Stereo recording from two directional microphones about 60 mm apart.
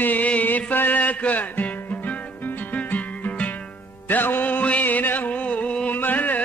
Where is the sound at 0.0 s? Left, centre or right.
Left.